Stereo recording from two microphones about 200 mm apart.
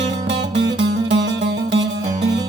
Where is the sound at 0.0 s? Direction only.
60° right (ahead or behind).